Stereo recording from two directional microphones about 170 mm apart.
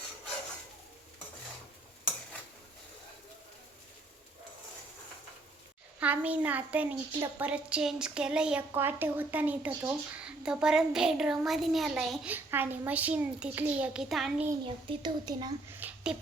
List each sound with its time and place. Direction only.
6.0 s a woman's voice: 10° right (ahead or behind)
14.6 s speech: 30° right (ahead or behind)
15.8 s a sound: 10° right (ahead or behind)